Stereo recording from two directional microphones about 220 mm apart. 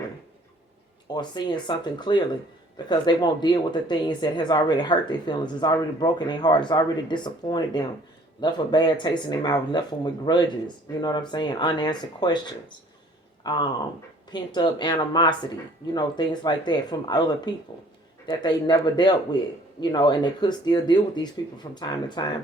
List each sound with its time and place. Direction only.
1.1 s speech: 20° left (ahead or behind)